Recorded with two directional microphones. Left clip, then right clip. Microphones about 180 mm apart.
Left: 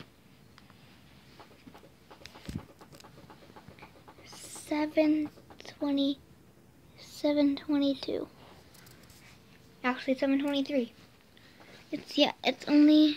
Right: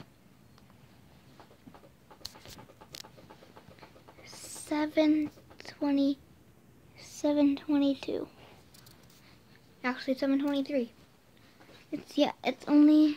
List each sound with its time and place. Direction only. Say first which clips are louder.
4.2 s a sound: right 1 dB; 20° right (ahead or behind)
7.2 s a woman's voice: even; 15° right (ahead or behind)
9.8 s speech: left 2 dB; 15° right (ahead or behind)
11.9 s speech: left 2 dB; 10° right (ahead or behind)